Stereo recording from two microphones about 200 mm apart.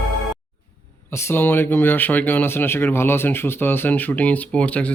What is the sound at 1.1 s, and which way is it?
Speech, 10° left (ahead or behind).